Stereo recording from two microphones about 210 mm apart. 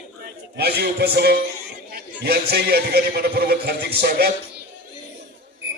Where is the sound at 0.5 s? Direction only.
50° right (ahead or behind).